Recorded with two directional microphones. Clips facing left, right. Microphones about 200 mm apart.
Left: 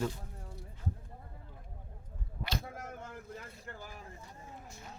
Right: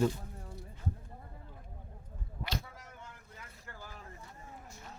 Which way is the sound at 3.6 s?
15° left (ahead or behind).